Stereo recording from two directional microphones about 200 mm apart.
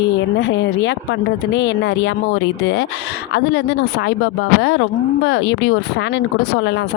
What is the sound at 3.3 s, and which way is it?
Speech, 60° left (ahead or behind).